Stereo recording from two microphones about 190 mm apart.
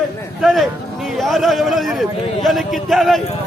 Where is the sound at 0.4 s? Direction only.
Centre (ahead or behind).